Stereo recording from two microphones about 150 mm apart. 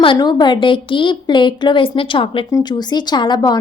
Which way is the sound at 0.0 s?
30° left (ahead or behind).